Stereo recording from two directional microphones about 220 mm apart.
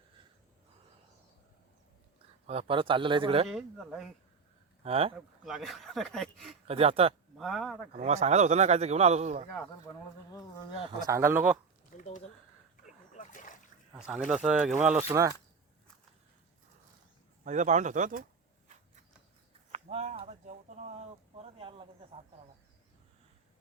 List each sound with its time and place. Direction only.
2.5 s speech: 25° right (ahead or behind)
3.5 s speech: centre (ahead or behind)
4.8 s speech: 25° right (ahead or behind)
5.4 s speech: centre (ahead or behind)
6.7 s speech: 25° right (ahead or behind)
7.3 s speech: centre (ahead or behind)
7.9 s a man's voice: 30° right (ahead or behind)
10.3 s speech: 15° left (ahead or behind)
11.0 s speech: 10° right (ahead or behind)
11.9 s speech: 35° left (ahead or behind)
12.7 s a sound: 35° left (ahead or behind)
13.9 s speech: 5° right (ahead or behind)
17.4 s a man's voice: 35° right (ahead or behind)
19.7 s a sound: 30° right (ahead or behind)